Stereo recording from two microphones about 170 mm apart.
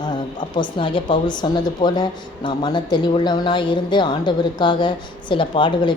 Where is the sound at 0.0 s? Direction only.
25° left (ahead or behind).